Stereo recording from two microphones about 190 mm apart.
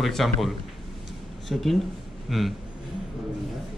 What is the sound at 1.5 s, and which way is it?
A man's voice, centre (ahead or behind).